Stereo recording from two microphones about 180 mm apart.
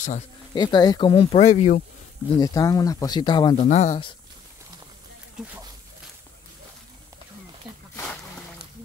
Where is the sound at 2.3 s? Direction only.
20° left (ahead or behind).